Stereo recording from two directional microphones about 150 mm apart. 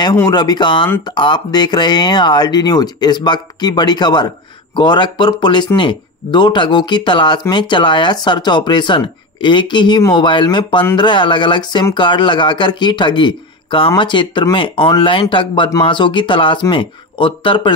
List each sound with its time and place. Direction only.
0.0 s speech: 25° left (ahead or behind)